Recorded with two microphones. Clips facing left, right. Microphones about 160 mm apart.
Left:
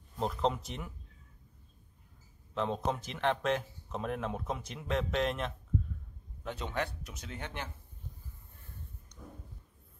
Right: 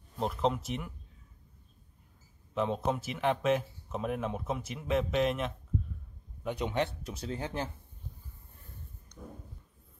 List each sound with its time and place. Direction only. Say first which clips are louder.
0.2 s speech: right 1 dB; centre (ahead or behind)
2.5 s speech: right 2 dB; 5° right (ahead or behind)
6.4 s speech: right 5 dB; 15° right (ahead or behind)